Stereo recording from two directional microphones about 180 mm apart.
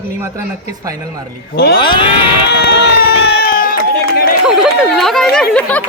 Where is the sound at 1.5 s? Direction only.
60° left (ahead or behind).